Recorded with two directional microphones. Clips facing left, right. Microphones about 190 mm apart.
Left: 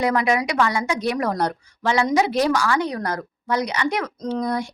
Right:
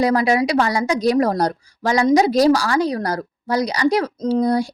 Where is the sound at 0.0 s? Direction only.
35° right (ahead or behind).